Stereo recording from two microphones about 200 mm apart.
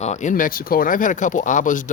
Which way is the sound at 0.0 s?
35° left (ahead or behind).